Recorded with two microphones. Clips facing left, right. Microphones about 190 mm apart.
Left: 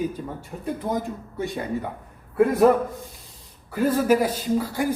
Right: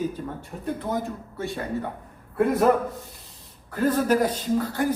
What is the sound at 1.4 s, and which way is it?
Speech, 15° left (ahead or behind).